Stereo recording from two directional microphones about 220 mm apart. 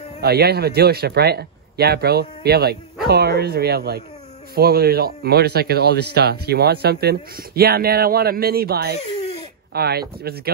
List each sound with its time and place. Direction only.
0.2 s speech: 45° right (ahead or behind)